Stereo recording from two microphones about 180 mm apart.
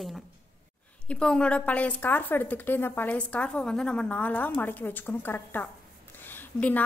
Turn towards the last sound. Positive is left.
turn(degrees=10)  # may be behind; listen again after turning